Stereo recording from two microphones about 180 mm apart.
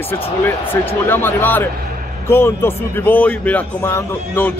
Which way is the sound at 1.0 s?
10° left (ahead or behind).